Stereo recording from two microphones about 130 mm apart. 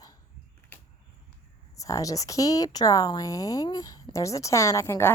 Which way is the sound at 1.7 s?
25° left (ahead or behind).